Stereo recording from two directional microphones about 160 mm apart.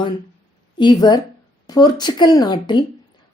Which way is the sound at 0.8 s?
30° left (ahead or behind).